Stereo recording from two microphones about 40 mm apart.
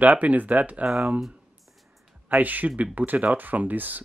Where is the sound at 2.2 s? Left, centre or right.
Right.